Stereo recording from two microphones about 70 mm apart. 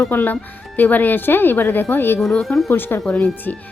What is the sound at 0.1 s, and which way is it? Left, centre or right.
Speech, left.